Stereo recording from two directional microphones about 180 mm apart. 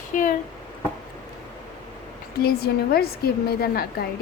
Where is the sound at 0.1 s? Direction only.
45° left (ahead or behind).